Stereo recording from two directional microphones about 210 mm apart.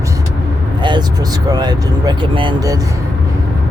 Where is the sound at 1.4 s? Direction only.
20° right (ahead or behind).